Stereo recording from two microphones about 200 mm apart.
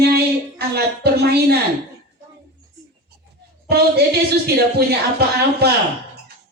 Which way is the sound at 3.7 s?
55° right (ahead or behind).